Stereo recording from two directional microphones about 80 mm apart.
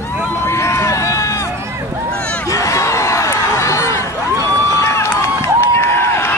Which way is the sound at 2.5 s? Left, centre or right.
Left.